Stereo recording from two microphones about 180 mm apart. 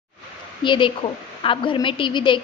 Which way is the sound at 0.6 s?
25° left (ahead or behind).